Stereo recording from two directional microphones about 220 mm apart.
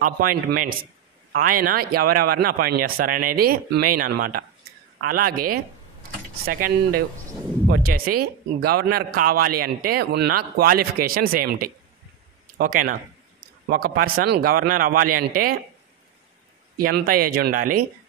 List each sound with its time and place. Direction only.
0.0 s a man's voice: 40° right (ahead or behind)
6.4 s a man's voice: 40° right (ahead or behind)
16.7 s a man's voice: 40° right (ahead or behind)